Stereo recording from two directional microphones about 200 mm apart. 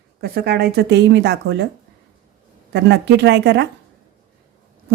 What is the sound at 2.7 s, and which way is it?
Speech, 60° right (ahead or behind).